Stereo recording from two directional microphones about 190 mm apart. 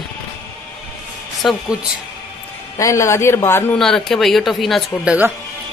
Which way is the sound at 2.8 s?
15° left (ahead or behind).